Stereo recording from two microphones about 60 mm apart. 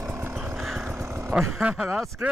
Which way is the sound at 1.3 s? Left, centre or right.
Centre.